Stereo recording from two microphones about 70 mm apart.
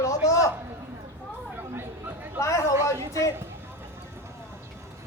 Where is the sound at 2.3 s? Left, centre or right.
Left.